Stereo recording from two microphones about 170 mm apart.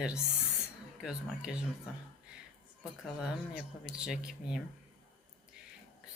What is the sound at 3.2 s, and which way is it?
A woman's voice, 5° right (ahead or behind).